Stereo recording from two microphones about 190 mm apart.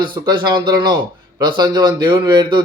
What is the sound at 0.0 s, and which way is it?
A man's voice, 25° right (ahead or behind).